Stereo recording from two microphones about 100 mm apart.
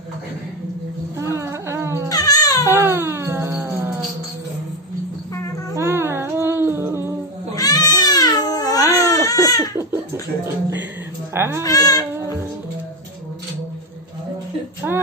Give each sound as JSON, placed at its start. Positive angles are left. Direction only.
{"t": 1.1, "sound": "music", "side_deg": -30}
{"t": 2.0, "sound": "music", "side_deg": 40}
{"t": 2.7, "sound": "music", "side_deg": -25}
{"t": 5.8, "sound": "music", "side_deg": -25}
{"t": 7.5, "sound": "cat", "side_deg": 40}
{"t": 8.9, "sound": "baby cry", "side_deg": 35}
{"t": 10.4, "sound": "a sound", "side_deg": -20}
{"t": 11.3, "sound": "speech", "side_deg": -25}
{"t": 11.6, "sound": "baby cry", "side_deg": 35}
{"t": 14.8, "sound": "female singing", "side_deg": -20}